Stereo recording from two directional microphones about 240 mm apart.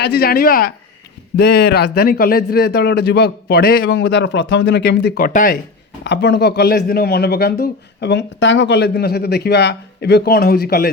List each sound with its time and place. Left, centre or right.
0.0 s speech: left
3.8 s speech: left
6.1 s speech: left